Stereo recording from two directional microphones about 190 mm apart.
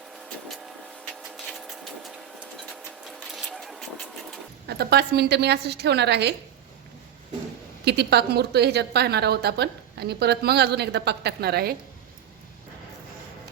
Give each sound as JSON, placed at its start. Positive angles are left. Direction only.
{"t": 0.3, "sound": "vehicle", "side_deg": 0}
{"t": 1.0, "sound": "printer", "side_deg": 0}
{"t": 4.6, "sound": "a woman's voice", "side_deg": -60}
{"t": 7.9, "sound": "a woman's voice", "side_deg": -60}